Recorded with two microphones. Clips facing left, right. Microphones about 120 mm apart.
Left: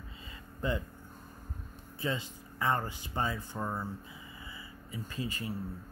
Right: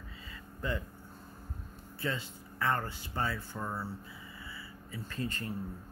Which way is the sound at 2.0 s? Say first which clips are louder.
Left 1 dB; 20° left (ahead or behind).